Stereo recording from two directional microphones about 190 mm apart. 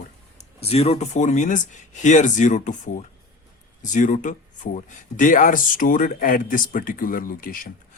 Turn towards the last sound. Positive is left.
turn(degrees=45)  # may be behind; listen again after turning